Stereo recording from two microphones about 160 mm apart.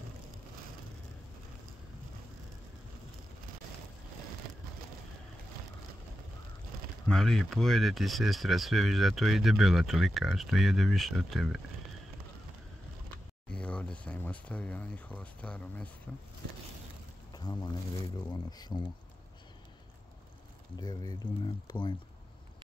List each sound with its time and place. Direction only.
7.1 s speech: 5° left (ahead or behind)
13.5 s a sound: 10° left (ahead or behind)
17.3 s boat: 25° left (ahead or behind)
18.3 s speech: 25° left (ahead or behind)
20.7 s speech: 25° left (ahead or behind)